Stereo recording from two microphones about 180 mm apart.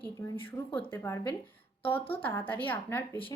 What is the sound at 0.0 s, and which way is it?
A woman's voice, 10° left (ahead or behind).